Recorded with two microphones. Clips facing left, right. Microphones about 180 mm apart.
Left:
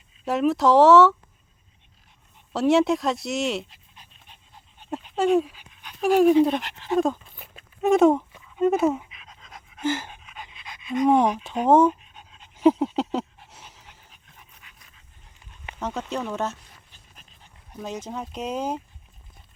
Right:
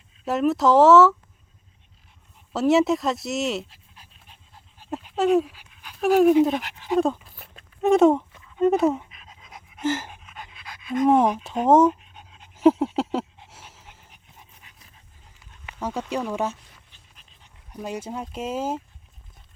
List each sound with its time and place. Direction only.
0.3 s speech: centre (ahead or behind)
2.5 s dog: centre (ahead or behind)
7.0 s a sound: centre (ahead or behind)
8.4 s pant: 5° left (ahead or behind)
14.1 s dog: 25° right (ahead or behind)
15.8 s speech: 10° right (ahead or behind)
17.2 s dog: 45° left (ahead or behind)
17.7 s speech: 10° right (ahead or behind)